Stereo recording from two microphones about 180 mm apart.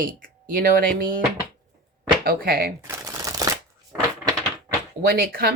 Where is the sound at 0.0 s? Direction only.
50° right (ahead or behind).